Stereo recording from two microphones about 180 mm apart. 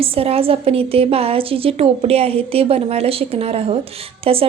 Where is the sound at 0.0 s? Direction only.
30° right (ahead or behind).